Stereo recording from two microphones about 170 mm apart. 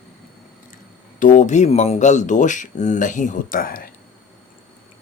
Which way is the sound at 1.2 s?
50° left (ahead or behind).